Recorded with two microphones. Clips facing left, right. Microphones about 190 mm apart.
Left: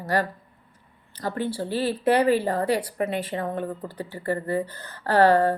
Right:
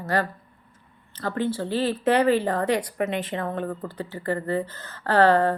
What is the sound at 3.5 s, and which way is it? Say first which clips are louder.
A woman's voice: right 1 dB; 15° left (ahead or behind).